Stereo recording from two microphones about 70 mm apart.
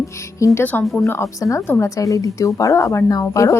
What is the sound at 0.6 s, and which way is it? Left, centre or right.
Speech, left.